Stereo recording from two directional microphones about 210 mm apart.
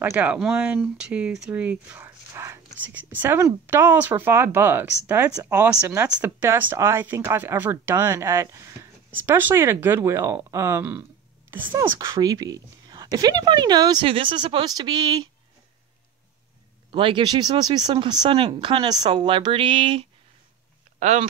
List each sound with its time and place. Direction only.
0.0 s speech: 10° right (ahead or behind)
16.9 s speech: 20° right (ahead or behind)